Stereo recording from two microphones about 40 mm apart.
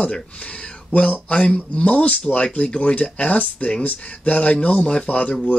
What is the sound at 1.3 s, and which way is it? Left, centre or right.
Speech, left.